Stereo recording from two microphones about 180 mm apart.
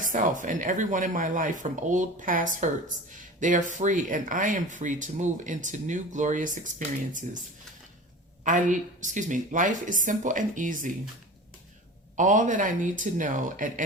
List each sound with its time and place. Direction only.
0.1 s speech: 45° right (ahead or behind)
8.4 s speech: 45° right (ahead or behind)
12.1 s speech: 45° right (ahead or behind)